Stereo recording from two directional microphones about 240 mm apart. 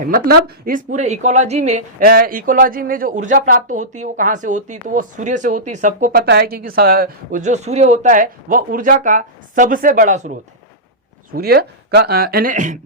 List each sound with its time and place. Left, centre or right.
0.0 s speech: right
11.3 s speech: right